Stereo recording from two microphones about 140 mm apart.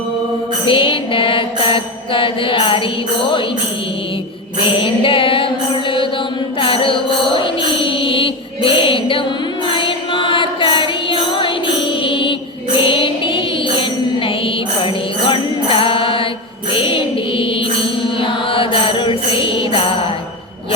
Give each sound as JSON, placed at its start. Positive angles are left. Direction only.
{"t": 0.7, "sound": "mantra", "side_deg": 40}
{"t": 4.6, "sound": "music", "side_deg": 40}
{"t": 12.0, "sound": "mantra", "side_deg": 40}
{"t": 16.7, "sound": "music", "side_deg": 40}
{"t": 18.2, "sound": "mantra", "side_deg": 40}